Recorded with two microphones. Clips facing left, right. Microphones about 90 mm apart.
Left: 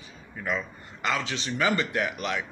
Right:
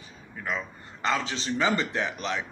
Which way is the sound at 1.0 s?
30° right (ahead or behind).